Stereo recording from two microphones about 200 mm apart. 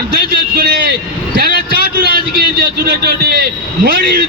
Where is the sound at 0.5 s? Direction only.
50° right (ahead or behind).